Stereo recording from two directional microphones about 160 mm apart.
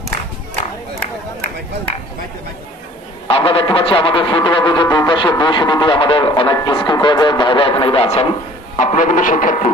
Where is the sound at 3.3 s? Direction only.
35° left (ahead or behind).